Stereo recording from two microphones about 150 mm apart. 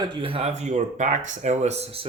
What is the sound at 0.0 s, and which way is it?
Speech, 35° right (ahead or behind).